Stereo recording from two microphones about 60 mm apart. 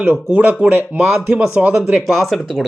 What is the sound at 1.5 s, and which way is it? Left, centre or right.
Speech, centre.